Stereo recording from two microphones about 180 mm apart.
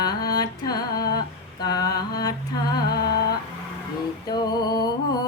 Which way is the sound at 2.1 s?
20° left (ahead or behind).